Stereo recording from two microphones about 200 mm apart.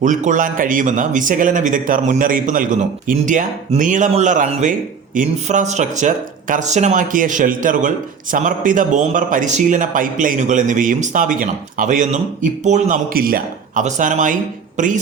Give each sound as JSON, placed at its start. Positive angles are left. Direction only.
{"t": 0.0, "sound": "speech", "side_deg": -40}